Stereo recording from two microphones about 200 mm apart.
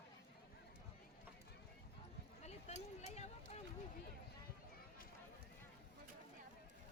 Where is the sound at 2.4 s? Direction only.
35° left (ahead or behind).